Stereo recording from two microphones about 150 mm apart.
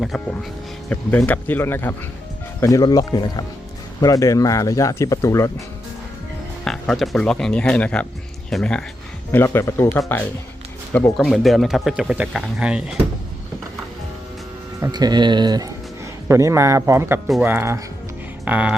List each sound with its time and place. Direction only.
0.1 s speech: centre (ahead or behind); by 5.6 s 20° left (ahead or behind)
6.7 s speech: centre (ahead or behind)
9.3 s speech: 15° left (ahead or behind)
11.2 s speech: centre (ahead or behind)
14.8 s speech: 25° right (ahead or behind)